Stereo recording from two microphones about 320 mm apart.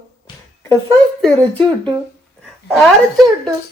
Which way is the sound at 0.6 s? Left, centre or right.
Centre.